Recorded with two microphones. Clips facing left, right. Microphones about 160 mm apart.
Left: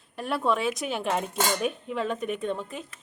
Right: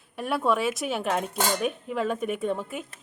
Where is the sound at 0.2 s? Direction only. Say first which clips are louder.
Right 1 dB; centre (ahead or behind).